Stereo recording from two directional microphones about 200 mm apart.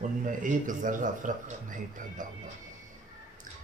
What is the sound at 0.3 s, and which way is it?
A man's voice, 40° right (ahead or behind).